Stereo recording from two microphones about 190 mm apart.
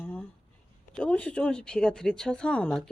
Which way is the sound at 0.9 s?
5° left (ahead or behind).